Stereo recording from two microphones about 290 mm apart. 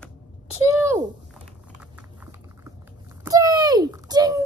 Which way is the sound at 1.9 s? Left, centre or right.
Centre.